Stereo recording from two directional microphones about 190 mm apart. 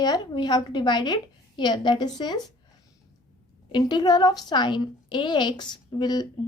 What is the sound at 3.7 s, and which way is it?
Speech, 20° left (ahead or behind).